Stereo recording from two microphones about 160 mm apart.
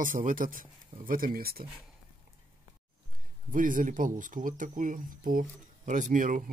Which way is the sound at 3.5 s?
55° right (ahead or behind).